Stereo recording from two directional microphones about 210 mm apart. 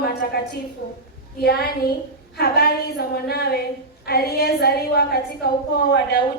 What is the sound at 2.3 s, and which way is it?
A woman's voice, 50° left (ahead or behind).